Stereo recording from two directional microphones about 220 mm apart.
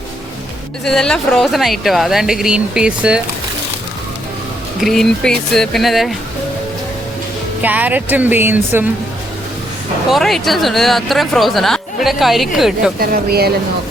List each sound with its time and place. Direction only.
0.9 s speech: centre (ahead or behind)
4.8 s speech: centre (ahead or behind)
7.6 s speech: 5° right (ahead or behind)
10.1 s speech: centre (ahead or behind)
13.0 s speech: 45° right (ahead or behind)